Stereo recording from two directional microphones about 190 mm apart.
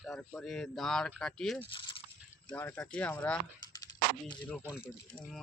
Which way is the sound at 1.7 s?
25° left (ahead or behind).